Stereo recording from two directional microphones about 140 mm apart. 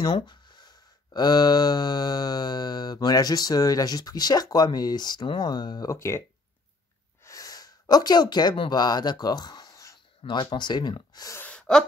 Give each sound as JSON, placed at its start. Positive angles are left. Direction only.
{"t": 0.0, "sound": "speech", "side_deg": 30}
{"t": 7.2, "sound": "speech", "side_deg": 25}
{"t": 11.3, "sound": "a sound", "side_deg": 10}